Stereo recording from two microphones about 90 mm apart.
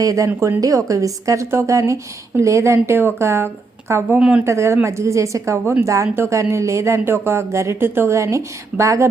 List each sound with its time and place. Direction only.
0.0 s speech: 40° right (ahead or behind)
4.2 s speech: 10° right (ahead or behind)
4.4 s speech: 35° right (ahead or behind)